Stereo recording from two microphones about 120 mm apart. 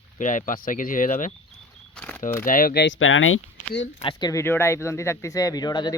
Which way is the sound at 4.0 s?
40° left (ahead or behind).